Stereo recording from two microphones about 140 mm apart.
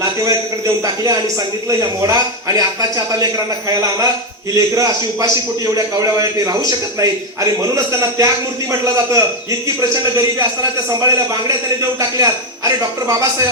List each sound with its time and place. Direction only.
1.8 s a man's voice: 25° right (ahead or behind)
8.8 s a man's voice: 25° right (ahead or behind)